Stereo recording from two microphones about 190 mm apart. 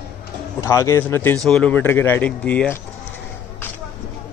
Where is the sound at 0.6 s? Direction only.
15° left (ahead or behind).